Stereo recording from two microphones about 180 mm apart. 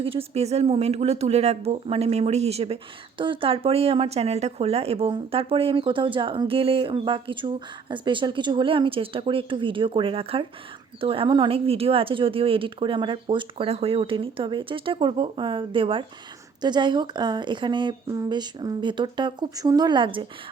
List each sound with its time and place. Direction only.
0.0 s speech: 30° right (ahead or behind)